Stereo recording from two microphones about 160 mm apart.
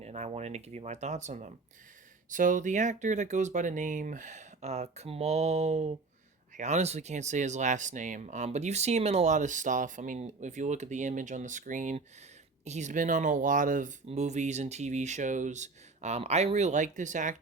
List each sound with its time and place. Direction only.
0.0 s speech: 40° right (ahead or behind)